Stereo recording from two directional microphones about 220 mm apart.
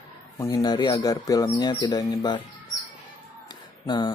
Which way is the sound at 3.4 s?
20° left (ahead or behind).